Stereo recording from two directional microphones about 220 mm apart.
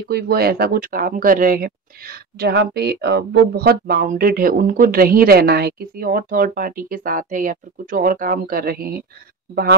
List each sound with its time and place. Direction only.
0.1 s speech: 45° right (ahead or behind)